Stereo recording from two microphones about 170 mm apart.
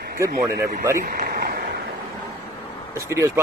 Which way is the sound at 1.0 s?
60° right (ahead or behind).